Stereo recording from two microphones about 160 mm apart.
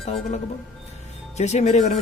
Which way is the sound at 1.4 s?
45° left (ahead or behind).